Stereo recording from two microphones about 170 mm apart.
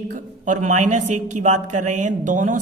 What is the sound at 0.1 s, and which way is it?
A man's voice, 45° right (ahead or behind).